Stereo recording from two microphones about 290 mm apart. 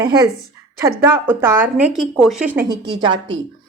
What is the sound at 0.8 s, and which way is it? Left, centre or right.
Speech, centre.